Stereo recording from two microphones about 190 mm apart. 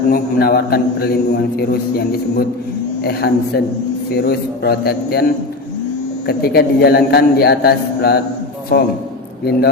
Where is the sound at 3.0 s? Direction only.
55° left (ahead or behind).